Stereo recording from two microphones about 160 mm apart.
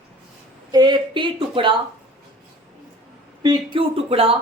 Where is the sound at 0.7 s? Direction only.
25° right (ahead or behind).